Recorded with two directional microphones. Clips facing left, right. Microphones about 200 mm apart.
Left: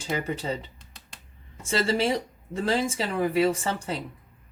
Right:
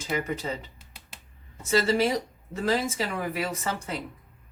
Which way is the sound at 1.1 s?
5° right (ahead or behind).